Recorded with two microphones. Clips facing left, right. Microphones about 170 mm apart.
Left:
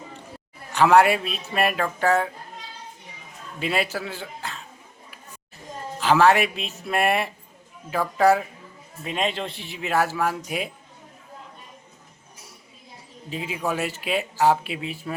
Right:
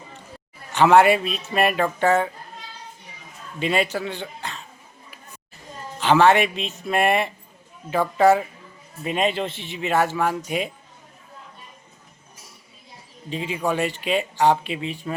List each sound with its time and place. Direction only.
0.7 s speech: centre (ahead or behind)
3.6 s speech: 5° left (ahead or behind)
6.0 s speech: centre (ahead or behind)
13.3 s speech: 5° left (ahead or behind)